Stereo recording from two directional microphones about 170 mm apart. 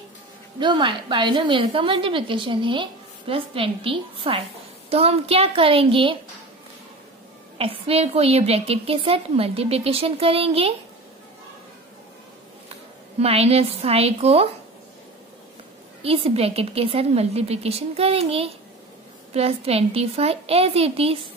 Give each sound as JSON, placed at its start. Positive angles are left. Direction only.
{"t": 0.6, "sound": "a woman's voice", "side_deg": -25}
{"t": 7.5, "sound": "a woman's voice", "side_deg": -35}
{"t": 13.2, "sound": "a woman's voice", "side_deg": -35}
{"t": 16.0, "sound": "a woman's voice", "side_deg": -35}